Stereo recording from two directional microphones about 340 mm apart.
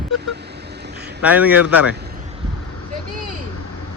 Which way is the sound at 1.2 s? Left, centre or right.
Centre.